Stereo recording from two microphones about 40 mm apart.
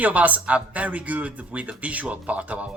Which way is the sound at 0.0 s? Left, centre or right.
Right.